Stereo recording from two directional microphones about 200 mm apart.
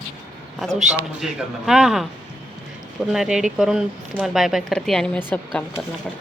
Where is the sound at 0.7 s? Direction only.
35° right (ahead or behind).